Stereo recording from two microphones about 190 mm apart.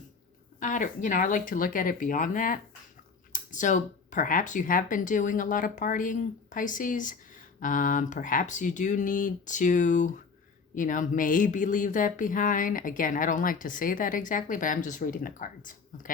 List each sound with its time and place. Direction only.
0.6 s a woman's voice: 40° left (ahead or behind)